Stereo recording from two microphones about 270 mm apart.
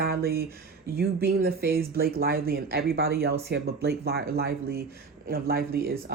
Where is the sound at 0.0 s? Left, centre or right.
Right.